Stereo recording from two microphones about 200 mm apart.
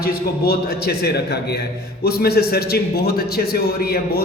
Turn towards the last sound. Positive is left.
turn(degrees=50)  # may be behind; listen again after turning